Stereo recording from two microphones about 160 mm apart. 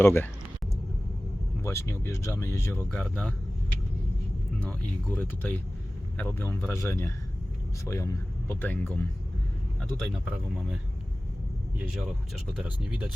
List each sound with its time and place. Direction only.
0.0 s speech: 15° left (ahead or behind)
1.6 s speech: 20° left (ahead or behind)
2.9 s speech: 5° left (ahead or behind)
4.6 s speech: 10° left (ahead or behind)
10.0 s speech: centre (ahead or behind)
11.8 s speech: 5° right (ahead or behind)